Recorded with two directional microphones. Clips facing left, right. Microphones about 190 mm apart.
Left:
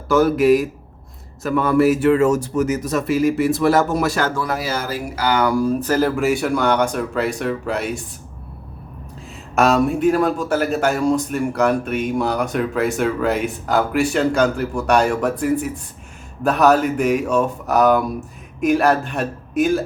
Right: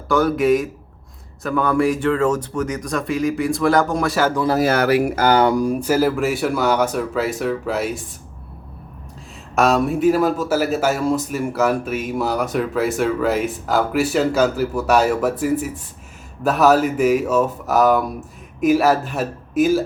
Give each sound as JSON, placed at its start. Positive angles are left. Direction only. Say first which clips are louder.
{"t": 0.1, "sound": "a man's voice", "louder": "left 2 dB", "side_deg": 0}
{"t": 4.6, "sound": "speech", "louder": "right 8 dB", "side_deg": -65}
{"t": 5.1, "sound": "speech", "louder": "right 4 dB", "side_deg": -45}
{"t": 5.4, "sound": "speech", "louder": "right 2 dB", "side_deg": -25}
{"t": 5.6, "sound": "a man's voice", "louder": "even", "side_deg": -10}
{"t": 9.6, "sound": "a man's voice", "louder": "left 1 dB", "side_deg": 0}